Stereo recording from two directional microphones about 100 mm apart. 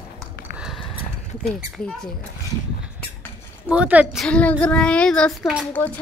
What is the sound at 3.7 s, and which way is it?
Speech, 15° right (ahead or behind).